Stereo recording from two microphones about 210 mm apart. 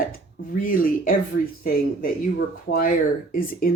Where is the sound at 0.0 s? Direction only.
40° left (ahead or behind).